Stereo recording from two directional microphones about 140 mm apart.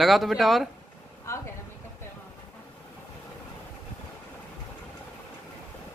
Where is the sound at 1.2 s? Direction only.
20° left (ahead or behind).